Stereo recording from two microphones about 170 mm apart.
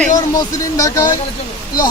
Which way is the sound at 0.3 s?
20° left (ahead or behind).